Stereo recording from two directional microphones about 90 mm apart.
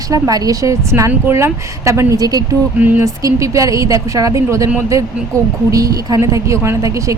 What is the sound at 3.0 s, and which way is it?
A woman's voice, 40° right (ahead or behind).